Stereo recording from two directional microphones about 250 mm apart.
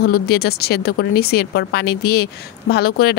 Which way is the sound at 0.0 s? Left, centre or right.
Left.